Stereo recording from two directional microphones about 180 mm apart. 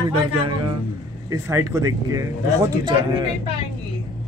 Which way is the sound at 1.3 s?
15° right (ahead or behind).